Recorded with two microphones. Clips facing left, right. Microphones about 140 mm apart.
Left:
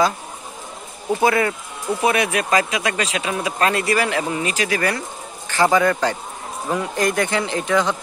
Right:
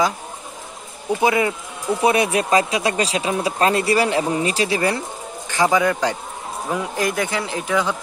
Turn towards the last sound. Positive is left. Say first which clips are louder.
# left 2 dB
turn(degrees=-5)  # may be behind; listen again after turning